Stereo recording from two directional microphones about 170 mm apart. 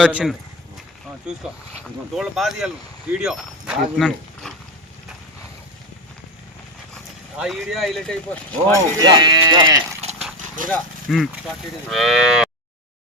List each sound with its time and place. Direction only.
0.0 s speech: 5° right (ahead or behind)
7.3 s speech: centre (ahead or behind)
9.0 s speech: 25° right (ahead or behind)
10.0 s dog: 40° right (ahead or behind)
10.7 s speech: centre (ahead or behind)